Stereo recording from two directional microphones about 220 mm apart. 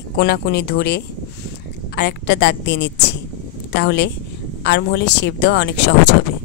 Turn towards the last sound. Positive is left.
turn(degrees=50)  # may be behind; listen again after turning